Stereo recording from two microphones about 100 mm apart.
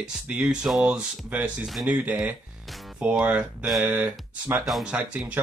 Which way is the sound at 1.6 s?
5° right (ahead or behind).